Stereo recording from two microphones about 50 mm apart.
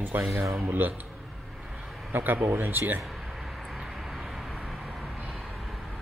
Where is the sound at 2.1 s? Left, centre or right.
Right.